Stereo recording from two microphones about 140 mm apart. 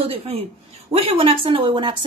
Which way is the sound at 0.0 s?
45° right (ahead or behind).